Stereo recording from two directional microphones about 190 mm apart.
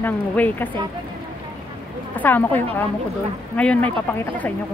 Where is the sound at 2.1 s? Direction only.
10° left (ahead or behind).